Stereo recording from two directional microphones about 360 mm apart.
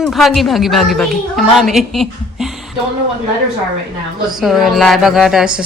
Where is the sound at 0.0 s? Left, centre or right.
Centre.